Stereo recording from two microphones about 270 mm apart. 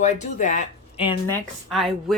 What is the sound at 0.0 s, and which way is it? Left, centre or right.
Speech, left.